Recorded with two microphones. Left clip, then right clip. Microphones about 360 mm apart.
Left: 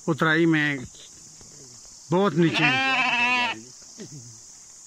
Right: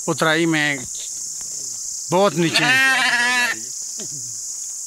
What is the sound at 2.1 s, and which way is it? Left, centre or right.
Sheep, centre.